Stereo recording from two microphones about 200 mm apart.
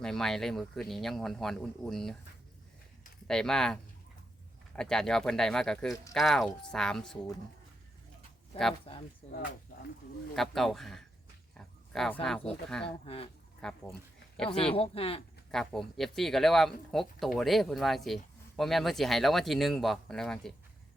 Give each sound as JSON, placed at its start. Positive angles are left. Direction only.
{"t": 0.0, "sound": "speech", "side_deg": 0}
{"t": 3.2, "sound": "speech", "side_deg": 5}
{"t": 8.9, "sound": "speech", "side_deg": 30}
{"t": 10.3, "sound": "speech", "side_deg": 0}
{"t": 11.5, "sound": "a sound", "side_deg": 0}
{"t": 12.2, "sound": "speech", "side_deg": 5}
{"t": 14.5, "sound": "speech", "side_deg": 30}
{"t": 15.5, "sound": "speech", "side_deg": 0}